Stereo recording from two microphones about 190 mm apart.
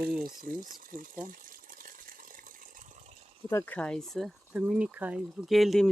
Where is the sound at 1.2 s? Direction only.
45° right (ahead or behind).